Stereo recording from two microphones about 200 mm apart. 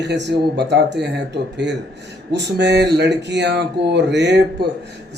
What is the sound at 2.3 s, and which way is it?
Speech, 60° right (ahead or behind).